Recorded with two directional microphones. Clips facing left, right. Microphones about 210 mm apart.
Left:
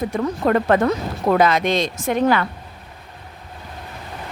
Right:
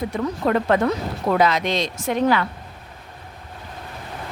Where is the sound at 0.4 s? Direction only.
50° left (ahead or behind).